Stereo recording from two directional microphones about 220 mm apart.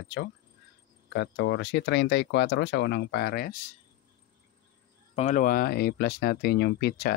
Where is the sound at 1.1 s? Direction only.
50° left (ahead or behind).